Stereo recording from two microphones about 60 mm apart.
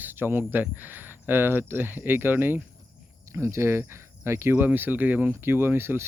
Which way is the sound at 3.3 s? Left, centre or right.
Right.